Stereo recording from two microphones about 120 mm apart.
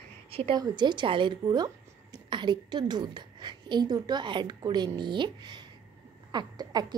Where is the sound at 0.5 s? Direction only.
40° right (ahead or behind).